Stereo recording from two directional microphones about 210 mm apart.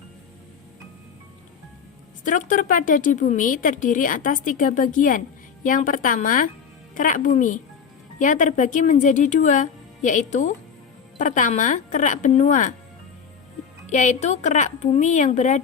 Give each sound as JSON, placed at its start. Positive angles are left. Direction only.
{"t": 2.2, "sound": "a woman's voice", "side_deg": 40}
{"t": 13.9, "sound": "a woman's voice", "side_deg": 35}